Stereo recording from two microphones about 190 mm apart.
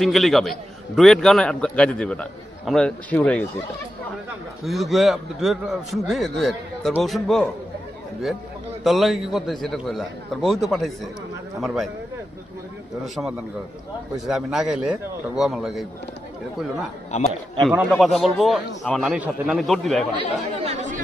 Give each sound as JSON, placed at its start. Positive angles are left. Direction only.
{"t": 0.0, "sound": "a man's voice", "side_deg": 0}
{"t": 4.6, "sound": "a man's voice", "side_deg": 0}
{"t": 8.8, "sound": "a man's voice", "side_deg": 0}
{"t": 13.0, "sound": "a man's voice", "side_deg": 0}
{"t": 17.6, "sound": "a man's voice", "side_deg": 0}
{"t": 20.2, "sound": "speech", "side_deg": -35}